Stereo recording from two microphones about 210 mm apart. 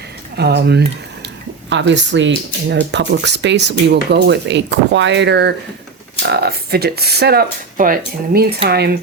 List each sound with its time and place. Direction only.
0.3 s speech: 50° right (ahead or behind)